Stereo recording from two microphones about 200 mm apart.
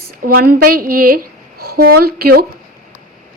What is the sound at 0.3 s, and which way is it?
A woman's voice, 50° right (ahead or behind).